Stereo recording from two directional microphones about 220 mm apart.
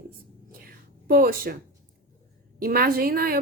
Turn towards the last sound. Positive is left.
turn(degrees=-40)  # may be behind; listen again after turning